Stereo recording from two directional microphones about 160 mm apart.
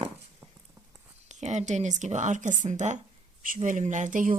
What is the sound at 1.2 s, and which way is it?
Speech, 50° right (ahead or behind).